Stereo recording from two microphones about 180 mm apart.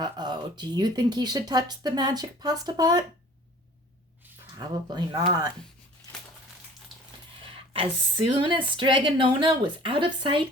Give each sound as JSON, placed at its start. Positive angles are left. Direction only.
{"t": 0.0, "sound": "speech", "side_deg": -25}
{"t": 4.5, "sound": "speech", "side_deg": -25}
{"t": 7.4, "sound": "speech", "side_deg": -30}